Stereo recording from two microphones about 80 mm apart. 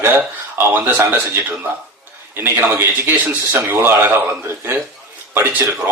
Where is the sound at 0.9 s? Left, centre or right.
Right.